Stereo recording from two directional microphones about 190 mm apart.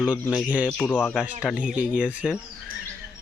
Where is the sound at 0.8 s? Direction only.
10° left (ahead or behind).